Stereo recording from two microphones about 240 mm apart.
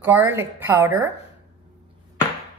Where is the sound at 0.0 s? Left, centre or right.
Centre.